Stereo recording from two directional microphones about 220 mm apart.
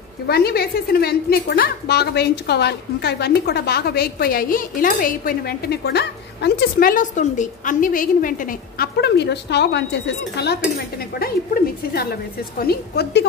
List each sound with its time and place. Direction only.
0.3 s a woman's voice: 45° left (ahead or behind)